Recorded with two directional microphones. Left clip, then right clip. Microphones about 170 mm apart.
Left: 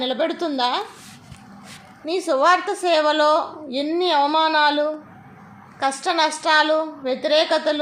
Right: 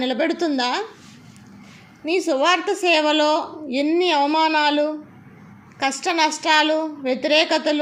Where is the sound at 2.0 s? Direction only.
25° right (ahead or behind).